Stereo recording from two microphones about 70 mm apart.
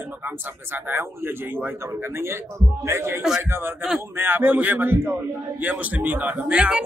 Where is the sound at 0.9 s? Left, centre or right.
Right.